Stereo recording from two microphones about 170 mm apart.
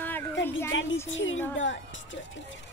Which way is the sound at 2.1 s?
90° left.